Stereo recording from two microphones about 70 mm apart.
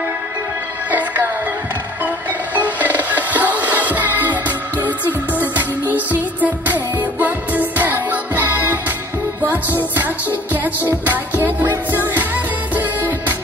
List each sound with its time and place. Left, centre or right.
0.9 s music: right
2.6 s music: right